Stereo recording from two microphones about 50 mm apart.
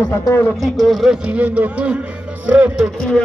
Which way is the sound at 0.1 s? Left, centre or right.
Left.